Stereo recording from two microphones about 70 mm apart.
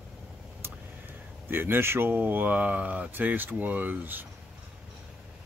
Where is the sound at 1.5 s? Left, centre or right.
Right.